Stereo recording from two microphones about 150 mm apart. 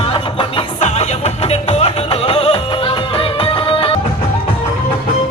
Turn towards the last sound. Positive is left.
turn(degrees=35)  # may be behind; listen again after turning